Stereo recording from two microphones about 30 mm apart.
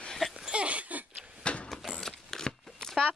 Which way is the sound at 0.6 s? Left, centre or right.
Right.